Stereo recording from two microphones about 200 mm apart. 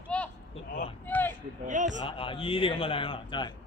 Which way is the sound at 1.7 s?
40° right (ahead or behind).